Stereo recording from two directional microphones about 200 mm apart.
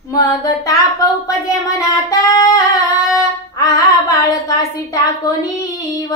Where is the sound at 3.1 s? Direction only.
15° left (ahead or behind).